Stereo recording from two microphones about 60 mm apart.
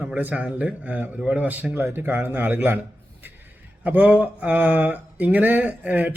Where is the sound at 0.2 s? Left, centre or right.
Right.